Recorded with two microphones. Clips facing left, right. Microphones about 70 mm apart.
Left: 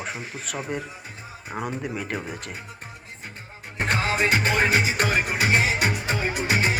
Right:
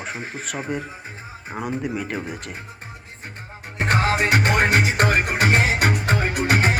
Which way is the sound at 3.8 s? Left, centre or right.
Right.